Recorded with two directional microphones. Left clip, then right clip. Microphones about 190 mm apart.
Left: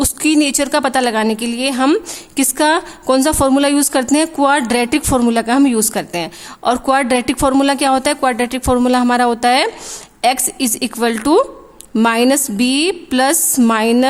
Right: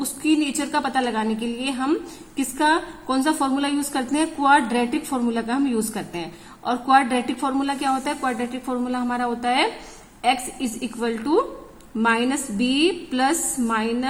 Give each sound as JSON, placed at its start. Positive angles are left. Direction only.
{"t": 0.2, "sound": "a woman's voice", "side_deg": 40}